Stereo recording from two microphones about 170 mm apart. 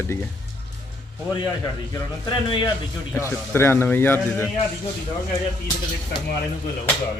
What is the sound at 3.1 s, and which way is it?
A man's voice, 15° left (ahead or behind).